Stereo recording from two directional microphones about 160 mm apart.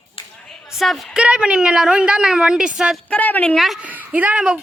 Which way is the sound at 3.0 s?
10° left (ahead or behind).